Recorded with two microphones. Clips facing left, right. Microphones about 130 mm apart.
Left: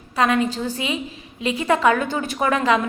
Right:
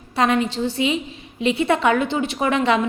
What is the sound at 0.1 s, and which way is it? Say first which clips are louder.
A woman's voice: even; 30° right (ahead or behind).